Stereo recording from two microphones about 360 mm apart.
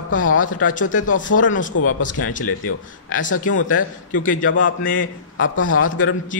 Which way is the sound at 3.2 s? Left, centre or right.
Left.